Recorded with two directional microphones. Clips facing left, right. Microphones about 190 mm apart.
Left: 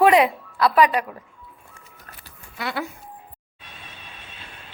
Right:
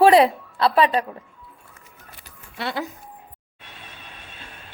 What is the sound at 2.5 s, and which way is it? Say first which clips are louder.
Speech: right 1 dB; 25° right (ahead or behind).